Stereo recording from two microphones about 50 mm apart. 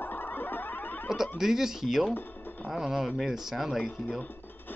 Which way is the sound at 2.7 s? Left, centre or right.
Centre.